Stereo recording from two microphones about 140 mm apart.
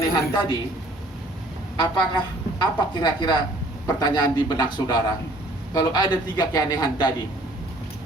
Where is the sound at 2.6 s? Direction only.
30° left (ahead or behind).